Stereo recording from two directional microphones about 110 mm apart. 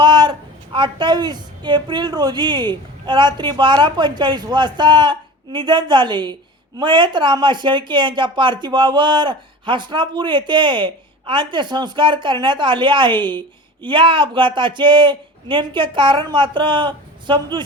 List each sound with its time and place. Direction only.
0.0 s speech: 45° right (ahead or behind)